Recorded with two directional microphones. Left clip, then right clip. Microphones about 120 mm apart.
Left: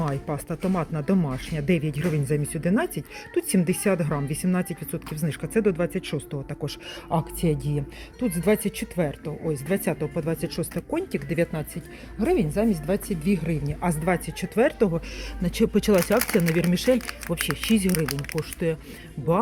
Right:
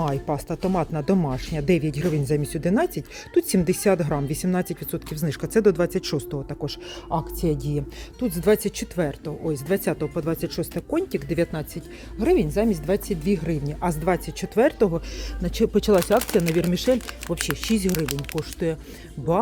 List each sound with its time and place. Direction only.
0.0 s speech: 25° right (ahead or behind)
6.3 s speech: 15° right (ahead or behind)
7.1 s speech: 5° left (ahead or behind)
7.5 s speech: 15° right (ahead or behind)
15.4 s speech: 10° right (ahead or behind)
17.3 s speech: 30° right (ahead or behind)
17.7 s speech: 15° right (ahead or behind)